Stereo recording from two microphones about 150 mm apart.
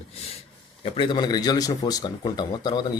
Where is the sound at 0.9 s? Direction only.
30° left (ahead or behind).